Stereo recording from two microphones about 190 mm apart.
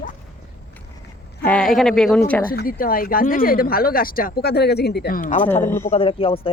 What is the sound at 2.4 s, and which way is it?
Speech, 50° left (ahead or behind).